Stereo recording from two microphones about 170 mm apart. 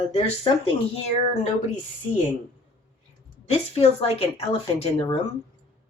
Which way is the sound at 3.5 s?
35° left (ahead or behind).